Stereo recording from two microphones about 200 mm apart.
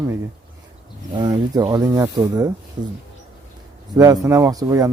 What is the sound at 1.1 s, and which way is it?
Speech, 20° right (ahead or behind).